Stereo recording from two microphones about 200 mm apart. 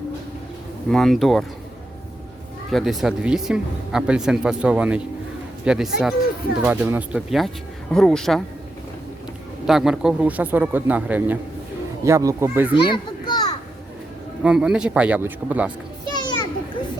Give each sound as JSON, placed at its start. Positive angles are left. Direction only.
{"t": 0.9, "sound": "speech", "side_deg": 0}
{"t": 2.6, "sound": "speech", "side_deg": 0}
{"t": 9.6, "sound": "speech", "side_deg": 0}
{"t": 12.7, "sound": "children playing", "side_deg": 20}
{"t": 14.4, "sound": "speech", "side_deg": -5}
{"t": 16.0, "sound": "children playing", "side_deg": 20}